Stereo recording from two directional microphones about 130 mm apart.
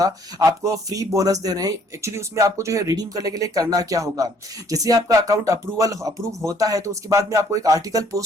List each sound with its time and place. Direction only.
0.0 s speech: 25° right (ahead or behind)